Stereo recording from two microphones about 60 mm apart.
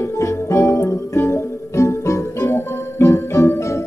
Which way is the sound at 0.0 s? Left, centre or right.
Left.